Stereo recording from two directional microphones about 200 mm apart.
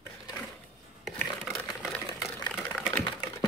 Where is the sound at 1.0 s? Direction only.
Centre (ahead or behind).